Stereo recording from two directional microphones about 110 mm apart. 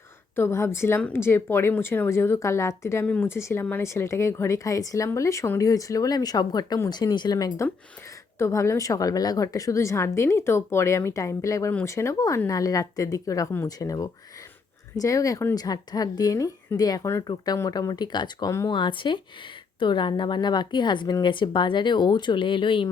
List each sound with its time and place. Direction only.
0.3 s a woman's voice: 25° left (ahead or behind); by 22.9 s 50° left (ahead or behind)